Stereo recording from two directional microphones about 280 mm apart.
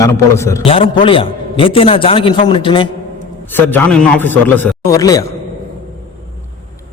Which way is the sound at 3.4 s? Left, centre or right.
Centre.